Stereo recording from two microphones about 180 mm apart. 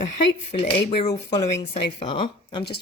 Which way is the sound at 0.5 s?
35° left (ahead or behind).